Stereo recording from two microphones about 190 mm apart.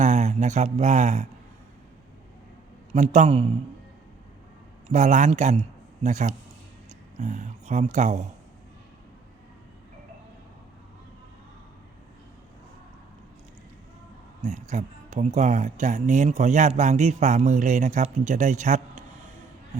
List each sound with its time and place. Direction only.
0.0 s speech: 35° right (ahead or behind)
2.9 s speech: 40° right (ahead or behind)
4.9 s a man's voice: 40° right (ahead or behind)
14.4 s speech: 40° right (ahead or behind)